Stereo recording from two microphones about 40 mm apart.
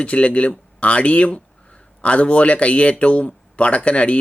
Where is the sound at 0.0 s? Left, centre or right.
Left.